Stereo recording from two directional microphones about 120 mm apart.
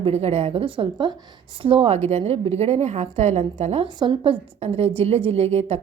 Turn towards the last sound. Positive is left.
turn(degrees=-60)  # may be behind; listen again after turning